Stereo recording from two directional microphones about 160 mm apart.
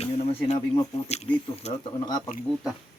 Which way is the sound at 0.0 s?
45° left (ahead or behind).